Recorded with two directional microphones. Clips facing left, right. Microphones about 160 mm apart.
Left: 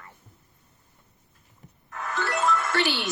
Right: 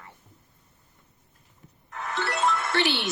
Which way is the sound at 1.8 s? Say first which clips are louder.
Left 1 dB; 25° right (ahead or behind).